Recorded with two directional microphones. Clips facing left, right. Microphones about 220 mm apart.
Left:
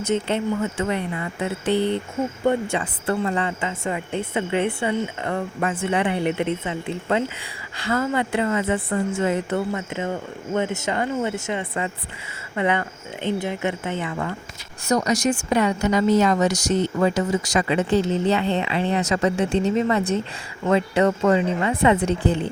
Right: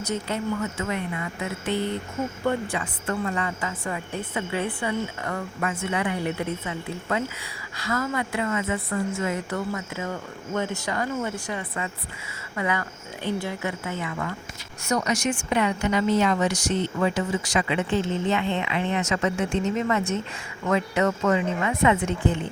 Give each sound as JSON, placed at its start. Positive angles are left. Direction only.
{"t": 0.0, "sound": "a woman's voice", "side_deg": 25}